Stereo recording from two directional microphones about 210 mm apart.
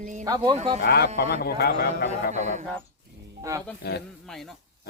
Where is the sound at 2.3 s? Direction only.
35° right (ahead or behind).